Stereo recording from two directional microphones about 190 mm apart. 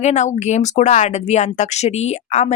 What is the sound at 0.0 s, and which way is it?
Speech, 35° left (ahead or behind).